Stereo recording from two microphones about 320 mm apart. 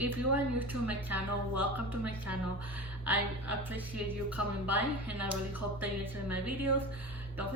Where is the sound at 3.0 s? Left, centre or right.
Centre.